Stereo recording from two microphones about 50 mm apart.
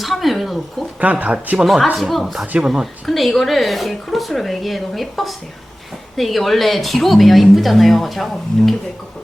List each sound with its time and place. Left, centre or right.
0.0 s speech: centre
1.2 s speech: right
1.6 s a woman's voice: centre